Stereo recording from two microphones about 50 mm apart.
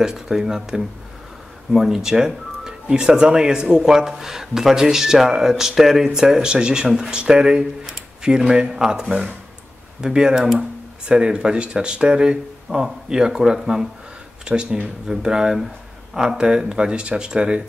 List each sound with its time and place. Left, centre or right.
0.0 s speech: centre
10.0 s speech: centre